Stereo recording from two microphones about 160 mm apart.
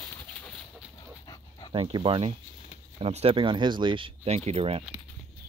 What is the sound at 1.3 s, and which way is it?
Dog, 30° left (ahead or behind).